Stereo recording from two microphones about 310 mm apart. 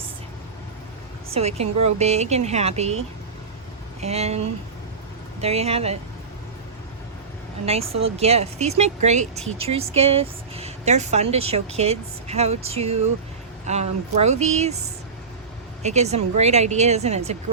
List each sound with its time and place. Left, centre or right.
1.3 s speech: centre
4.0 s speech: right
7.6 s speech: centre
15.8 s speech: right